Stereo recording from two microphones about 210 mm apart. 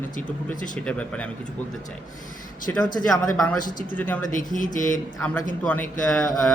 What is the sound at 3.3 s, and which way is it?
Speech, 5° left (ahead or behind).